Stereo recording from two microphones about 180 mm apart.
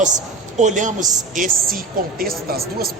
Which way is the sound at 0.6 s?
40° right (ahead or behind).